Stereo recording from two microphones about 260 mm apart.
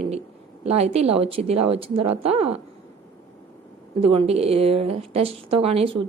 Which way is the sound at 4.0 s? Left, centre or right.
Right.